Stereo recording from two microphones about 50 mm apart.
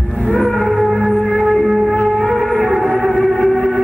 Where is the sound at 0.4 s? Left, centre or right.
Centre.